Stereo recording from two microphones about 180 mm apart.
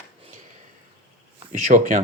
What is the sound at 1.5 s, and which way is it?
Speech, 45° right (ahead or behind).